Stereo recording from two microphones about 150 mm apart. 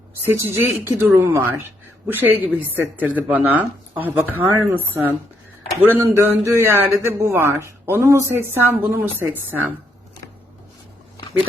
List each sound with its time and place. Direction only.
0.3 s a man's voice: 15° right (ahead or behind)